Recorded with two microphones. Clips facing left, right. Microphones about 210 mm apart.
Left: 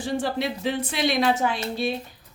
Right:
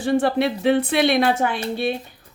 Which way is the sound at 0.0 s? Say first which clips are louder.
Right 7 dB; 60° right (ahead or behind).